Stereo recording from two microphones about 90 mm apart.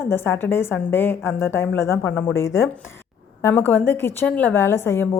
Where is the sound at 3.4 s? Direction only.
20° left (ahead or behind).